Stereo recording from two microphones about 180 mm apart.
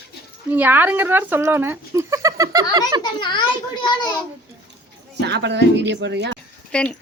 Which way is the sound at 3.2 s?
25° left (ahead or behind).